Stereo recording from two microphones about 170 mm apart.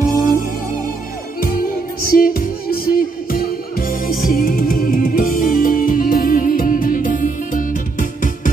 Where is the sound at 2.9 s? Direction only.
60° left (ahead or behind).